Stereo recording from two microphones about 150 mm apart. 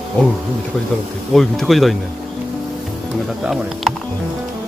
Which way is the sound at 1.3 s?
Centre (ahead or behind).